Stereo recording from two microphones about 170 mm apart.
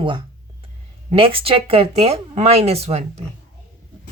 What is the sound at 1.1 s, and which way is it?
Speech, 35° right (ahead or behind).